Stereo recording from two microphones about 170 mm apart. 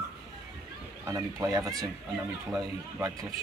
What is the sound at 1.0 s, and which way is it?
A child's voice, 20° right (ahead or behind).